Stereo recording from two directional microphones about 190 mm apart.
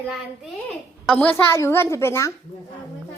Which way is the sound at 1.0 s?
10° left (ahead or behind).